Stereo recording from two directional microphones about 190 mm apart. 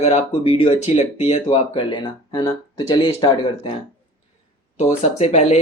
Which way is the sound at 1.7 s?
25° left (ahead or behind).